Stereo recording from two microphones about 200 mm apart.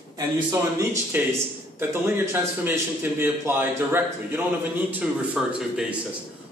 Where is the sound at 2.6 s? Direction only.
10° right (ahead or behind).